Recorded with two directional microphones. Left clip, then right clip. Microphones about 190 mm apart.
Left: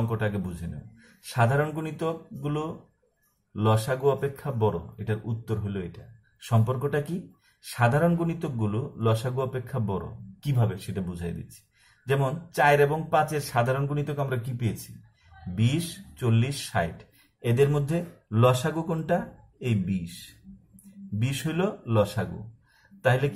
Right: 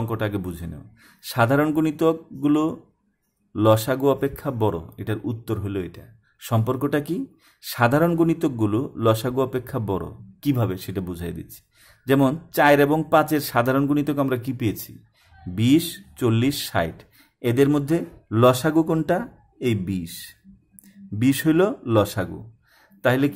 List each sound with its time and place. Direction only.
1.3 s a man's voice: 50° right (ahead or behind)
16.2 s a man's voice: 50° right (ahead or behind)